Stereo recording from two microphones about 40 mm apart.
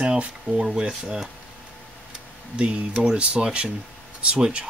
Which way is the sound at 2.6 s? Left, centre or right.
Right.